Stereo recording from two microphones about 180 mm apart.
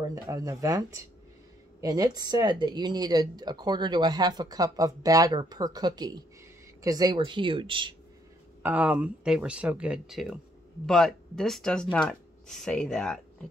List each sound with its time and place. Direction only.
0.0 s speech: 20° right (ahead or behind)
8.6 s speech: 10° right (ahead or behind)